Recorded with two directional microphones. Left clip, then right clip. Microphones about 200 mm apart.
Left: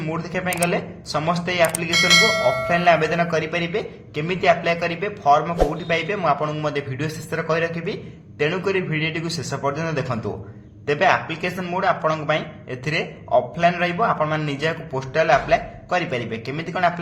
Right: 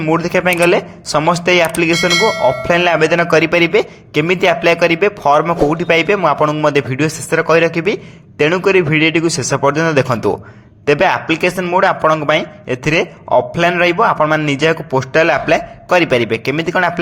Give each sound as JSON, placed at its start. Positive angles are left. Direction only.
{"t": 0.0, "sound": "speech", "side_deg": -45}
{"t": 1.9, "sound": "speech", "side_deg": 0}
{"t": 2.6, "sound": "speech", "side_deg": -45}